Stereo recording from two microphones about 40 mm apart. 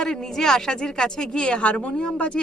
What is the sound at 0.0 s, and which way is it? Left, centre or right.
A woman's voice, centre.